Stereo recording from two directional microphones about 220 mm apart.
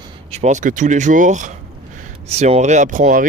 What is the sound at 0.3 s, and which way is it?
Speech, 30° right (ahead or behind).